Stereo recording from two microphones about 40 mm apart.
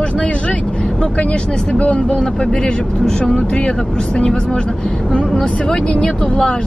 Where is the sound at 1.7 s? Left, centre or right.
Left.